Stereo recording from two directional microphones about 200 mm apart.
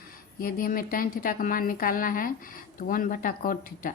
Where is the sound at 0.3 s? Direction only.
45° left (ahead or behind).